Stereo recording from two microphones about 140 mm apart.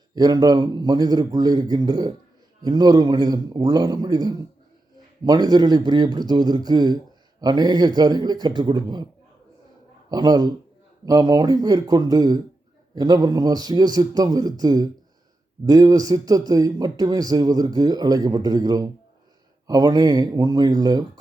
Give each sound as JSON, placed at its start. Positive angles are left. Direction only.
{"t": 0.1, "sound": "speech", "side_deg": -30}
{"t": 10.1, "sound": "speech", "side_deg": -30}